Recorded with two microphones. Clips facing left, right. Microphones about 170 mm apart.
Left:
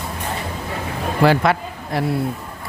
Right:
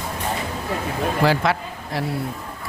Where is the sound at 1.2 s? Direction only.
60° left (ahead or behind).